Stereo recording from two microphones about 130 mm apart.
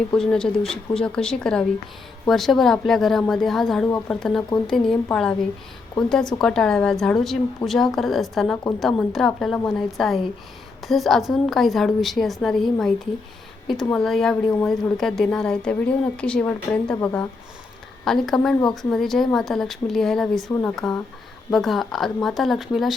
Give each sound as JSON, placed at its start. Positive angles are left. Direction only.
{"t": 0.1, "sound": "a woman's voice", "side_deg": 5}
{"t": 13.9, "sound": "a woman's voice", "side_deg": 5}